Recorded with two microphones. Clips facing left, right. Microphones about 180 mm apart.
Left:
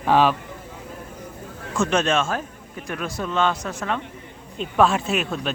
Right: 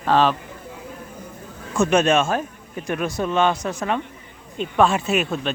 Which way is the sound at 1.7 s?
10° right (ahead or behind).